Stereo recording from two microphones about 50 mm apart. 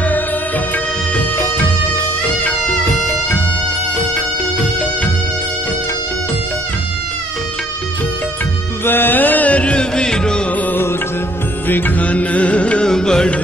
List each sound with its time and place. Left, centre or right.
8.8 s music: left; by 10.4 s centre
11.6 s music: left
12.8 s carnatic music: centre